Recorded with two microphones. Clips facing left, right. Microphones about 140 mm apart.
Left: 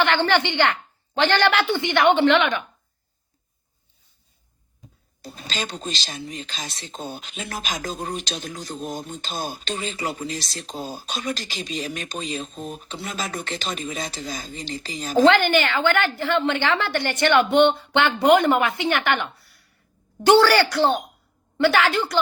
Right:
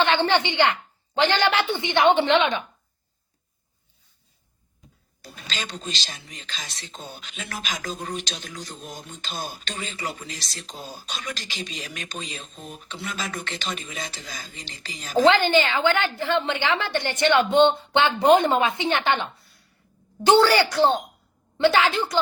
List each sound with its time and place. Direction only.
0.0 s a woman's voice: 20° right (ahead or behind)
5.2 s speech: 35° left (ahead or behind)
15.2 s a woman's voice: 20° right (ahead or behind)